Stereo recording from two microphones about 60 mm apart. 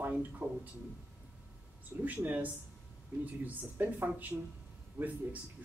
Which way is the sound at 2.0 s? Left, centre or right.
Right.